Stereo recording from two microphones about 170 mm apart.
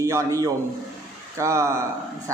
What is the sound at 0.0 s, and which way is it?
A man's voice, 15° right (ahead or behind).